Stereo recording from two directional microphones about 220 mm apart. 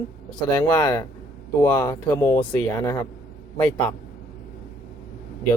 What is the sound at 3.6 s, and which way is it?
Speech, 5° left (ahead or behind).